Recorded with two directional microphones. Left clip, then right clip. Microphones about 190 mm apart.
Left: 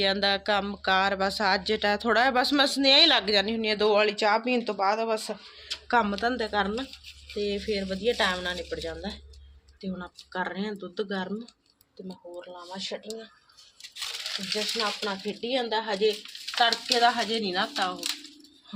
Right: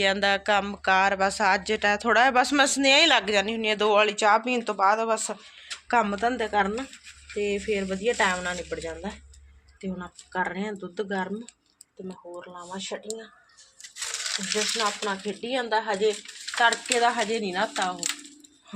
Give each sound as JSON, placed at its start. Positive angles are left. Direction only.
{"t": 0.0, "sound": "speech", "side_deg": -5}
{"t": 14.8, "sound": "speech", "side_deg": 0}
{"t": 16.6, "sound": "speech", "side_deg": -15}